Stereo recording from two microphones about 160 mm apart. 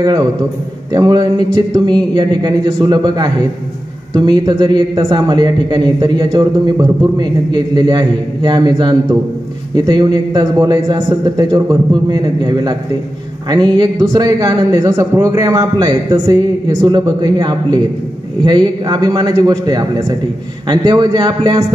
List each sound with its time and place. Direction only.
0.9 s a man's voice: 25° right (ahead or behind)
13.7 s a man's voice: 20° right (ahead or behind)